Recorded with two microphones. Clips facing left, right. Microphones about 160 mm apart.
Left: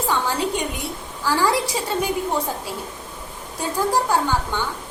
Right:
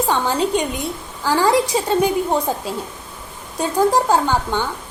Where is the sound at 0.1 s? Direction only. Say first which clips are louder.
Right 2 dB; 20° right (ahead or behind).